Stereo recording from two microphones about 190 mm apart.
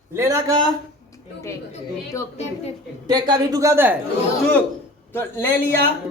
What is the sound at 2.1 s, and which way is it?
Speech, 15° left (ahead or behind).